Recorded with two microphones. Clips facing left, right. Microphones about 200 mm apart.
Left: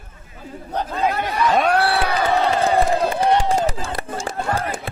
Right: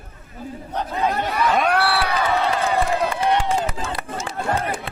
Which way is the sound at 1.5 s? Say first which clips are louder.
Left 3 dB; 30° left (ahead or behind).